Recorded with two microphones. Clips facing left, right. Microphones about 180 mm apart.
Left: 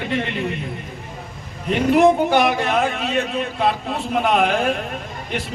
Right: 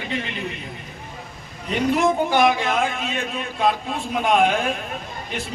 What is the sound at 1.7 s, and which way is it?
Speech, 65° left (ahead or behind).